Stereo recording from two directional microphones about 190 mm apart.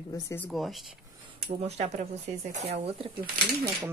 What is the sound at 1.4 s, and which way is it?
Speech, 35° right (ahead or behind).